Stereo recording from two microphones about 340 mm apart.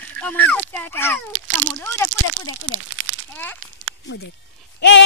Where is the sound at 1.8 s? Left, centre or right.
Centre.